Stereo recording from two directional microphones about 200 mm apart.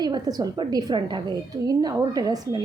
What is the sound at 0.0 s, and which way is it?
A woman's voice, 20° right (ahead or behind).